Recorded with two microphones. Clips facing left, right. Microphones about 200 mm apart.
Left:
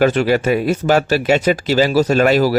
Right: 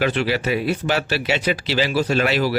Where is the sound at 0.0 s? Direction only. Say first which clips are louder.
Left 7 dB; 45° left (ahead or behind).